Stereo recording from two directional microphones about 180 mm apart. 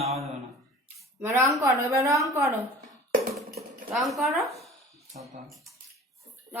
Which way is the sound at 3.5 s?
Centre (ahead or behind).